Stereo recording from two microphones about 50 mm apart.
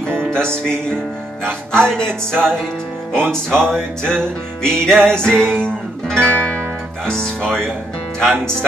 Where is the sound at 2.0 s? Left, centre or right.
Right.